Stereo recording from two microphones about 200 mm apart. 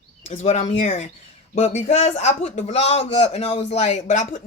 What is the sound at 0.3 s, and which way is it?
Speech, 35° left (ahead or behind).